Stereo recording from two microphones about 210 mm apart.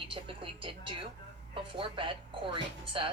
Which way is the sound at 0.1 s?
25° right (ahead or behind).